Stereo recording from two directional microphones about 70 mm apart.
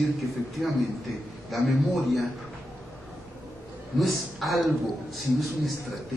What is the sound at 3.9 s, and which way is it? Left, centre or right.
Speech, centre.